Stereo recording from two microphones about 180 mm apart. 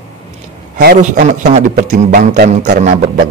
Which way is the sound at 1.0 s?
40° right (ahead or behind).